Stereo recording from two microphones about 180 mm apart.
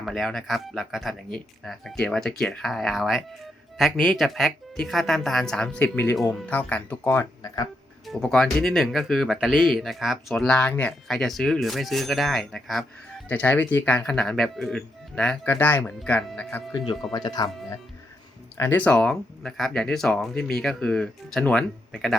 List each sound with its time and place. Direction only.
0.0 s speech: centre (ahead or behind); by 7.7 s 20° left (ahead or behind)
8.0 s speech: 5° left (ahead or behind)
17.1 s speech: 20° left (ahead or behind)
18.5 s speech: 15° left (ahead or behind)